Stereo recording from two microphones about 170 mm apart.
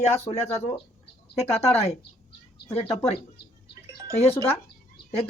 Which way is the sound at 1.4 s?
35° left (ahead or behind).